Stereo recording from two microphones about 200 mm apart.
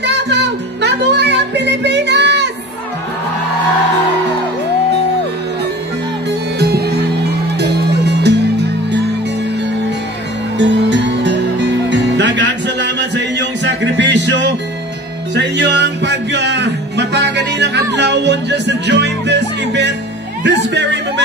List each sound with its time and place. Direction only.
0.0 s music: 60° right (ahead or behind)
6.6 s music: 55° right (ahead or behind)
10.6 s music: 60° right (ahead or behind)
20.4 s speech: 60° right (ahead or behind)